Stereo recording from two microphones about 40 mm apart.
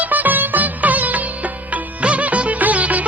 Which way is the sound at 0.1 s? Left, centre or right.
Right.